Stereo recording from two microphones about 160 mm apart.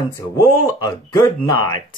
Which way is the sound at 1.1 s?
25° left (ahead or behind).